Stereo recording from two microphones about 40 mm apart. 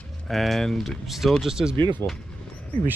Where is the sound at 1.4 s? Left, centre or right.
Centre.